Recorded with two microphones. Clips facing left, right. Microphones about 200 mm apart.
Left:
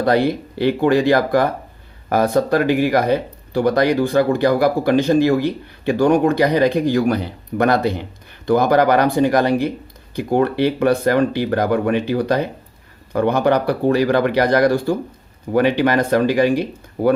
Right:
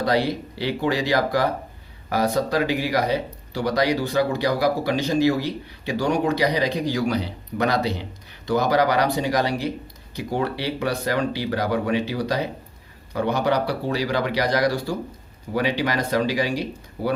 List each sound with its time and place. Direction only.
0.0 s speech: 55° left (ahead or behind)